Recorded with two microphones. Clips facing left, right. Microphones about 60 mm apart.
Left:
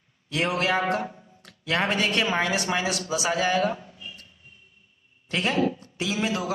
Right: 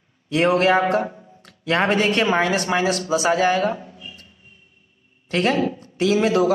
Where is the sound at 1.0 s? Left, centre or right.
Right.